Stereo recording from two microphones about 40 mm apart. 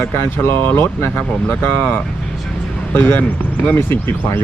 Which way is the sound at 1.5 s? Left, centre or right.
Left.